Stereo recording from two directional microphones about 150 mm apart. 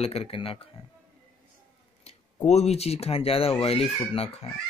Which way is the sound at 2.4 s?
45° left (ahead or behind).